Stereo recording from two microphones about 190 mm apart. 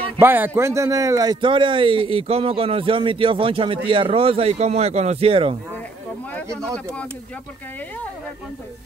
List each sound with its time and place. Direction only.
0.2 s a man's voice: 10° right (ahead or behind); by 5.6 s 30° right (ahead or behind)